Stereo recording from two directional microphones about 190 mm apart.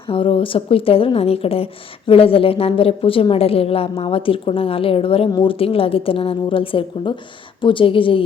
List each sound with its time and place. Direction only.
0.1 s speech: 30° left (ahead or behind)